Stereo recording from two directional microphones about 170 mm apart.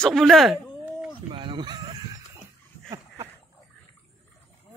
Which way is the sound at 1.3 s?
30° right (ahead or behind).